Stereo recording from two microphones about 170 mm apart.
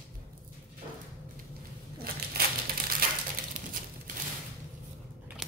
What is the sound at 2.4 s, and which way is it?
Crushing, 65° right (ahead or behind).